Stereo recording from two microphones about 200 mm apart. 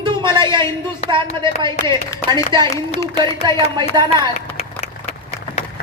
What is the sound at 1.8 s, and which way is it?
Speech, 15° left (ahead or behind).